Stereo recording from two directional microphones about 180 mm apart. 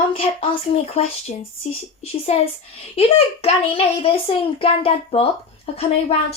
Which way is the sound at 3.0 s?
35° left (ahead or behind).